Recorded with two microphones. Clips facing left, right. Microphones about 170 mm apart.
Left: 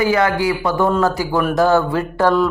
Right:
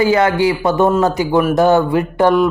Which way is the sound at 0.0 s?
25° right (ahead or behind).